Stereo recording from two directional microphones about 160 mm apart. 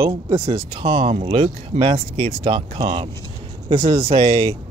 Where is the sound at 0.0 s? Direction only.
35° right (ahead or behind).